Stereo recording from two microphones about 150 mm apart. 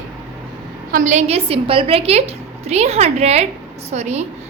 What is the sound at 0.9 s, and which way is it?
A woman's voice, 60° right (ahead or behind).